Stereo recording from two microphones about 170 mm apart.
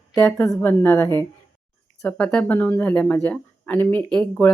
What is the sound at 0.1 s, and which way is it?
Speech, 20° left (ahead or behind).